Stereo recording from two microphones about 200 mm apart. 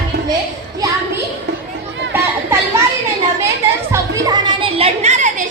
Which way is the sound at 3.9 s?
15° right (ahead or behind).